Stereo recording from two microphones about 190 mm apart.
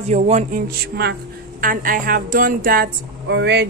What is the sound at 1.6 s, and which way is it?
A woman's voice, 45° right (ahead or behind).